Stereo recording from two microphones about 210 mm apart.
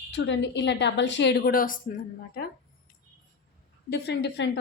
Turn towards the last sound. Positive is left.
turn(degrees=55)  # may be behind; listen again after turning